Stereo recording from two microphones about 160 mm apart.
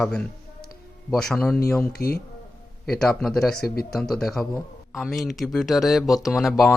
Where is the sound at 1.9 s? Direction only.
75° left (ahead or behind).